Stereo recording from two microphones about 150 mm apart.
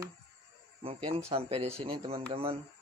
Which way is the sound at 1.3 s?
40° right (ahead or behind).